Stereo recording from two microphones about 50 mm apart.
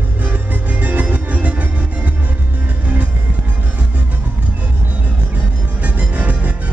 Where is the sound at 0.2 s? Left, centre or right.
Right.